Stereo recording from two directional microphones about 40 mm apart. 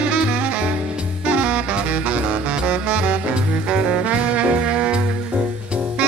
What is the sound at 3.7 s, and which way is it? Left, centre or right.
Music, right.